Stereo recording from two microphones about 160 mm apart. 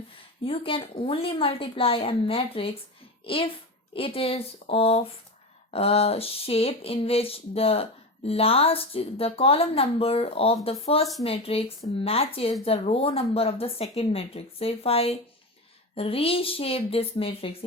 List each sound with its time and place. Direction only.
0.4 s speech: 35° left (ahead or behind)